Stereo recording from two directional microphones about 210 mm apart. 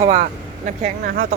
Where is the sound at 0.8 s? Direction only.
45° right (ahead or behind).